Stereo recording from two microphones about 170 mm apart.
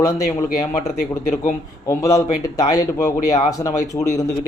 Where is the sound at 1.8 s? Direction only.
20° left (ahead or behind).